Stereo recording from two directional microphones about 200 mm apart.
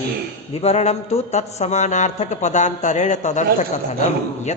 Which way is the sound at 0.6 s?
30° left (ahead or behind).